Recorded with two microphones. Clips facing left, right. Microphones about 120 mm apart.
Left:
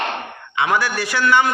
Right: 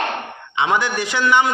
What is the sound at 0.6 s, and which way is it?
Speech, 20° right (ahead or behind).